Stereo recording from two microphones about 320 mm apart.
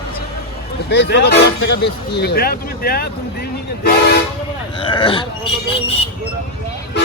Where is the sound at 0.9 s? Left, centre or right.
Left.